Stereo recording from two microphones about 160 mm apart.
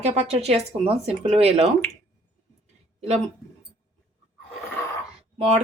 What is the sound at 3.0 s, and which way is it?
Speech, 40° right (ahead or behind).